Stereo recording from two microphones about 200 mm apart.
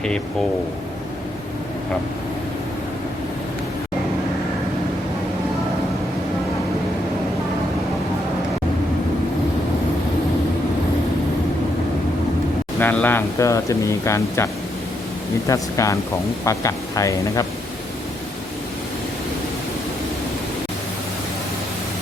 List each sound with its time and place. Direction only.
12.8 s speech: 10° left (ahead or behind)